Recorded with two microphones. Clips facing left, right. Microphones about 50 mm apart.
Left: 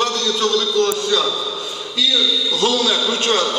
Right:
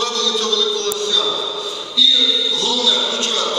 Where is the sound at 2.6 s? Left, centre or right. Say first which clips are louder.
Left 4 dB; left.